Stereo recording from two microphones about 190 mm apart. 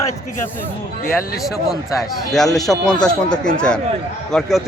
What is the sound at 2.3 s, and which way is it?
Speech, centre (ahead or behind).